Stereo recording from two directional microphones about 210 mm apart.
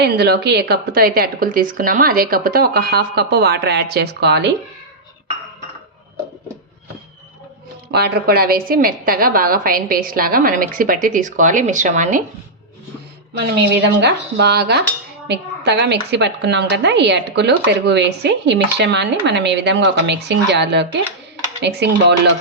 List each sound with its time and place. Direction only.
0.0 s speech: 50° right (ahead or behind)
7.9 s speech: 50° right (ahead or behind)
13.3 s a woman's voice: 55° right (ahead or behind)